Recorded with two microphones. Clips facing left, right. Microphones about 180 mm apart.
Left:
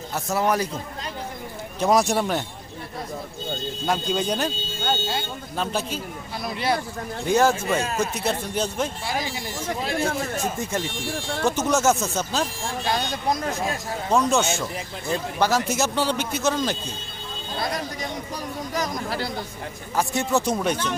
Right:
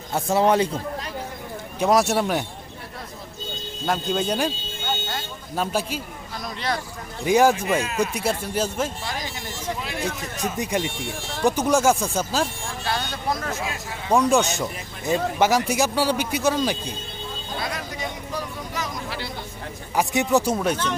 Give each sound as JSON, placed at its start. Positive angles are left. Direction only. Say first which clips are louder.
{"t": 0.1, "sound": "speech", "louder": "right 4 dB", "side_deg": -30}
{"t": 1.9, "sound": "speech", "louder": "right 1 dB", "side_deg": -5}
{"t": 3.8, "sound": "speech", "louder": "right 1 dB", "side_deg": 0}
{"t": 5.5, "sound": "a man's voice", "louder": "right 2 dB", "side_deg": -10}
{"t": 6.4, "sound": "speech", "louder": "left 3 dB", "side_deg": 10}
{"t": 7.3, "sound": "a man's voice", "louder": "right 2 dB", "side_deg": -10}
{"t": 9.6, "sound": "speech", "louder": "left 3 dB", "side_deg": 40}
{"t": 10.6, "sound": "a man's voice", "louder": "right 2 dB", "side_deg": -15}
{"t": 12.8, "sound": "speech", "louder": "left 2 dB", "side_deg": 15}
{"t": 13.4, "sound": "speech", "louder": "left 3 dB", "side_deg": 35}
{"t": 14.1, "sound": "a man's voice", "louder": "right 2 dB", "side_deg": -15}
{"t": 18.7, "sound": "a sound", "louder": "left 6 dB", "side_deg": 40}
{"t": 20.0, "sound": "a man's voice", "louder": "right 3 dB", "side_deg": -15}